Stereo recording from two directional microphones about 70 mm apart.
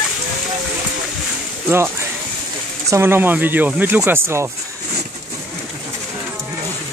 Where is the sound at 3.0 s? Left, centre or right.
Right.